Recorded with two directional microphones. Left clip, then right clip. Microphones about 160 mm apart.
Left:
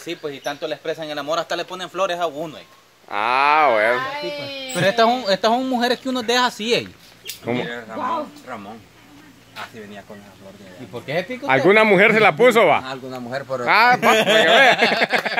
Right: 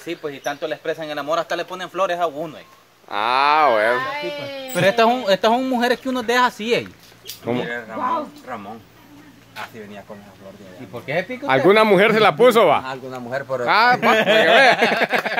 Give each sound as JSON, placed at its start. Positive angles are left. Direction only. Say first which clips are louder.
{"t": 0.0, "sound": "speech", "louder": "right 1 dB", "side_deg": 5}
{"t": 4.4, "sound": "speech", "louder": "right 2 dB", "side_deg": -20}
{"t": 7.4, "sound": "speech", "louder": "right 1 dB", "side_deg": -15}
{"t": 10.9, "sound": "a man's voice", "louder": "right 1 dB", "side_deg": 25}
{"t": 11.4, "sound": "speech", "louder": "even", "side_deg": -5}
{"t": 12.8, "sound": "speech", "louder": "right 1 dB", "side_deg": -15}
{"t": 13.7, "sound": "speech", "louder": "left 1 dB", "side_deg": 0}
{"t": 13.9, "sound": "a man's voice", "louder": "even", "side_deg": 30}
{"t": 14.6, "sound": "speech", "louder": "even", "side_deg": -5}